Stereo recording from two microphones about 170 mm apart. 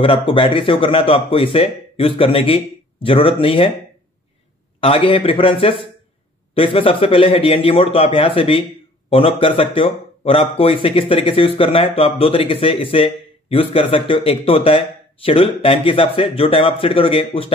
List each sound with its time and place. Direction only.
0.0 s speech: 30° left (ahead or behind)
4.7 s speech: 35° left (ahead or behind)